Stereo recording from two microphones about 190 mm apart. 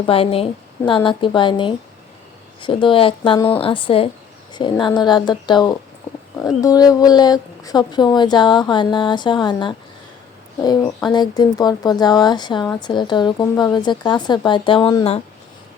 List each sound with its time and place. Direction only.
0.0 s a woman's voice: 30° left (ahead or behind)